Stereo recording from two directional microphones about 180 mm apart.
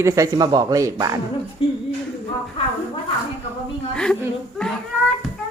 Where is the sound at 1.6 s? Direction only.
30° left (ahead or behind).